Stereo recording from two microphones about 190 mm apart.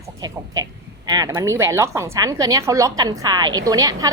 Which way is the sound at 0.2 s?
20° right (ahead or behind).